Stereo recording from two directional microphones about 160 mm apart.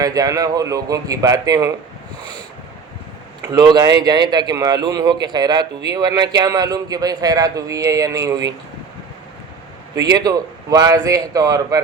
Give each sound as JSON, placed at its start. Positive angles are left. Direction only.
{"t": 0.0, "sound": "a man's voice", "side_deg": -20}
{"t": 3.4, "sound": "a man's voice", "side_deg": -25}
{"t": 10.1, "sound": "a man's voice", "side_deg": -25}